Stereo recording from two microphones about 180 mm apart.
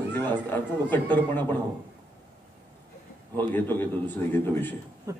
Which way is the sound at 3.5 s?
10° left (ahead or behind).